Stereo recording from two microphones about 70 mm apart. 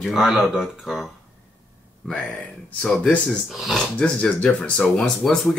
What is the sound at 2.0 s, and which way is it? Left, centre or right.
Speech, centre.